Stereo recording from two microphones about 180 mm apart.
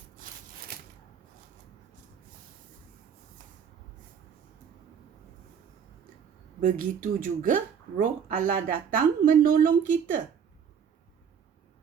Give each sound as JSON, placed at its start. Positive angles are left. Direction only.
{"t": 6.6, "sound": "speech", "side_deg": -45}